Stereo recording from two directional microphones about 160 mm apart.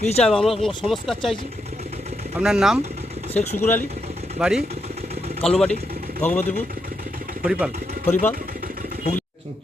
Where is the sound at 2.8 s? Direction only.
40° right (ahead or behind).